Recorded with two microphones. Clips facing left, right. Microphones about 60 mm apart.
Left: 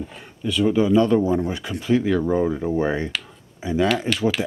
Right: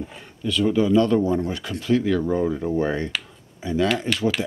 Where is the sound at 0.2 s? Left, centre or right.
Centre.